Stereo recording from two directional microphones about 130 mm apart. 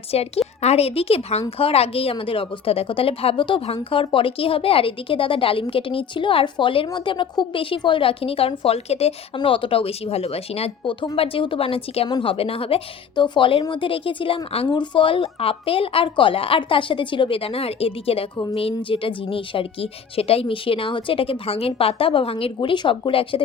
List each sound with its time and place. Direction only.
0.1 s a woman's voice: 50° left (ahead or behind)